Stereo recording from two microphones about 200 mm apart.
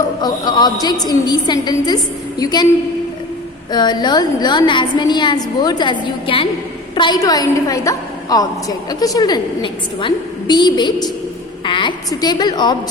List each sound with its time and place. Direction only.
0.2 s a woman's voice: 20° left (ahead or behind)
3.7 s a woman's voice: 20° left (ahead or behind)